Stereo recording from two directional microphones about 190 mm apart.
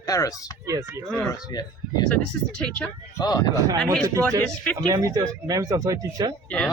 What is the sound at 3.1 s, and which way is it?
Speech, 20° left (ahead or behind).